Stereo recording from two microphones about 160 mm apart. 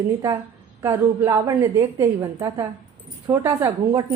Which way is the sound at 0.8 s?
15° right (ahead or behind).